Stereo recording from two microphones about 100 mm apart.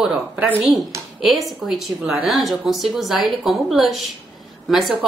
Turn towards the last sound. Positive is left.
turn(degrees=0)  # may be behind; listen again after turning